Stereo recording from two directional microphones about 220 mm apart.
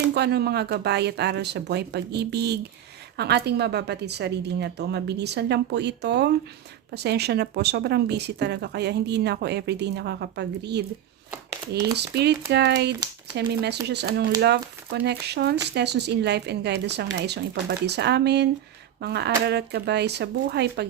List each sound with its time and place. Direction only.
0.1 s speech: 45° right (ahead or behind)
11.9 s speech: 50° right (ahead or behind)